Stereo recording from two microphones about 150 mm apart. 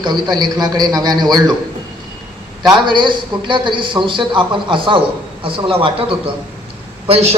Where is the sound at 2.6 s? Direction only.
30° right (ahead or behind).